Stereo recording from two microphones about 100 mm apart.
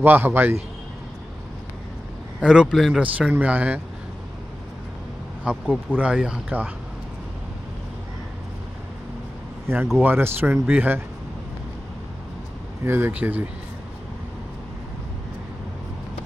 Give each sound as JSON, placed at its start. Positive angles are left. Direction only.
{"t": 0.0, "sound": "speech", "side_deg": -20}
{"t": 2.4, "sound": "speech", "side_deg": -5}
{"t": 3.0, "sound": "speech", "side_deg": -15}
{"t": 5.5, "sound": "speech", "side_deg": -10}
{"t": 9.9, "sound": "speech", "side_deg": -20}
{"t": 12.8, "sound": "speech", "side_deg": -25}